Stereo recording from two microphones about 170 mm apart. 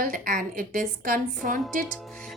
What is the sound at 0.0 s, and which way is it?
A woman's voice, 55° right (ahead or behind).